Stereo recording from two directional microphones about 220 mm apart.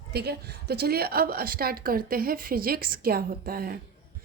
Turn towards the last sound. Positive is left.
turn(degrees=-40)  # may be behind; listen again after turning